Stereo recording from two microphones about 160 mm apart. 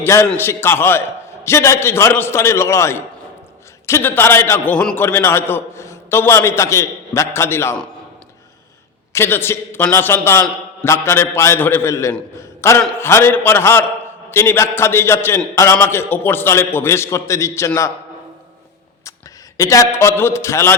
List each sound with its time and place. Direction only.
0.0 s a man's voice: 15° left (ahead or behind)
9.1 s a man's voice: 15° left (ahead or behind)
12.4 s a sound: 15° left (ahead or behind)
13.0 s a man's voice: 15° left (ahead or behind)
19.5 s a man's voice: 20° left (ahead or behind)